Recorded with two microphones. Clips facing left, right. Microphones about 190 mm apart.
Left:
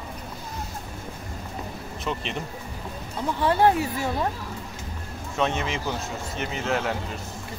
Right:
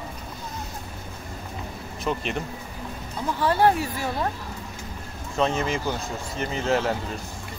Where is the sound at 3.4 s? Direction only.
20° left (ahead or behind).